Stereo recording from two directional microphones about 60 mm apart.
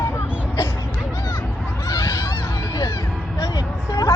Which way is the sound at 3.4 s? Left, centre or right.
Left.